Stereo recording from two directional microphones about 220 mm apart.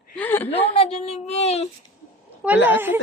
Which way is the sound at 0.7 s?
25° left (ahead or behind).